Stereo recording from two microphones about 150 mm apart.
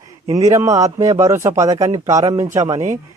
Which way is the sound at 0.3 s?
20° right (ahead or behind).